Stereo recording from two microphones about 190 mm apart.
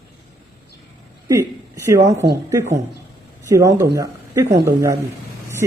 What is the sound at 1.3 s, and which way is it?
Speech, 15° right (ahead or behind).